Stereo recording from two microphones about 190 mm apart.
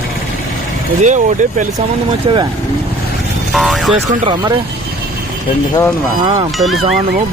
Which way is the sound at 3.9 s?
25° right (ahead or behind).